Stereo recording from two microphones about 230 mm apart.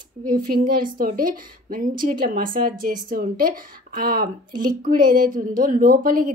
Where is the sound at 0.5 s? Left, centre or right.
Right.